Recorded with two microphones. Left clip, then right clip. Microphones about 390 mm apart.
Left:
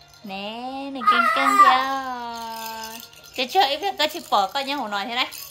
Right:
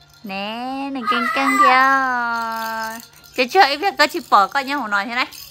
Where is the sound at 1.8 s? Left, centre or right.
Centre.